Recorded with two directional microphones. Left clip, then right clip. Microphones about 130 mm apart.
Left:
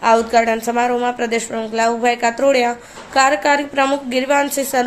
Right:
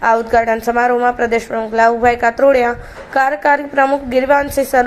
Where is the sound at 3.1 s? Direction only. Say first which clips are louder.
Right 1 dB; 35° left (ahead or behind).